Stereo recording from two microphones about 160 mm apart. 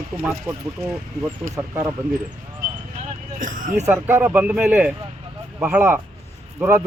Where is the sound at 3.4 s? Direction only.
55° right (ahead or behind).